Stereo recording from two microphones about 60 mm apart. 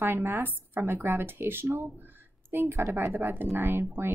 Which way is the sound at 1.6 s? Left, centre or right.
Right.